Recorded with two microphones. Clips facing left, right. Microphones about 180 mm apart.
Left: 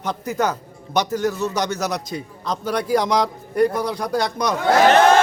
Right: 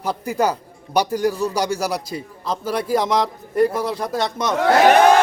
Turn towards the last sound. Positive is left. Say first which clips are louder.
# right 1 dB
turn(degrees=-10)  # may be behind; listen again after turning